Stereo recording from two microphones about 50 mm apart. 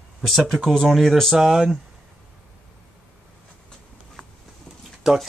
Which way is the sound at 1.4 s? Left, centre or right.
Centre.